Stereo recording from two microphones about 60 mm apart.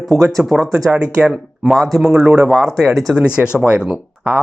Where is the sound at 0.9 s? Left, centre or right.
Centre.